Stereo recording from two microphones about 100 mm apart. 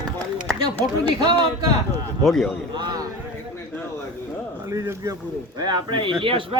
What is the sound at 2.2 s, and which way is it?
Speech, centre (ahead or behind).